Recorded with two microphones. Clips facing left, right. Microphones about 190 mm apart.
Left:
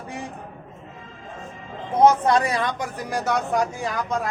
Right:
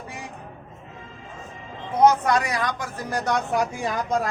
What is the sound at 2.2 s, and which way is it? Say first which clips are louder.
Speech: left 2 dB; 30° left (ahead or behind).